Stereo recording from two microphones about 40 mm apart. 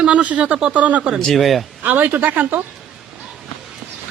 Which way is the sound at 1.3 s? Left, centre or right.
Centre.